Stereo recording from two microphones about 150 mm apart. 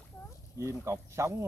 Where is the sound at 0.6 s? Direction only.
20° right (ahead or behind).